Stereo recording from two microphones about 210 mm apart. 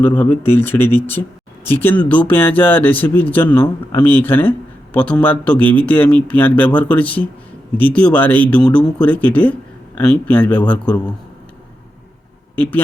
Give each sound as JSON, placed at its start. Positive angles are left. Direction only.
{"t": 0.0, "sound": "a man's voice", "side_deg": 10}